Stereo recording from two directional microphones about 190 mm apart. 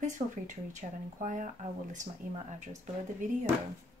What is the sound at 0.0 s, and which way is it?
Speech, 40° right (ahead or behind).